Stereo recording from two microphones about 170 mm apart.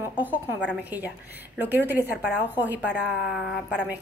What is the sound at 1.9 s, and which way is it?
A woman's voice, 10° right (ahead or behind).